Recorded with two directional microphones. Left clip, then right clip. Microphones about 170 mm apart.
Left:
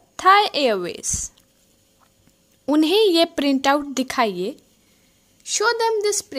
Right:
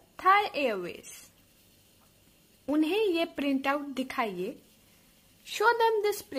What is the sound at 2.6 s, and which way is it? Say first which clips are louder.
A woman's voice: left 11 dB; 50° left (ahead or behind).